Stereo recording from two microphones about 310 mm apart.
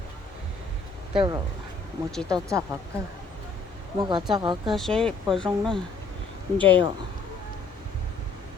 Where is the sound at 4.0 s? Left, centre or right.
Centre.